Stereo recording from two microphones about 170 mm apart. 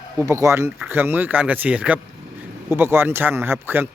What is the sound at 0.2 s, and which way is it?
A man's voice, 15° right (ahead or behind).